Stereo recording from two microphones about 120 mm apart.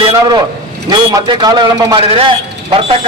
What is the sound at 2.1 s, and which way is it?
Speech, 45° right (ahead or behind).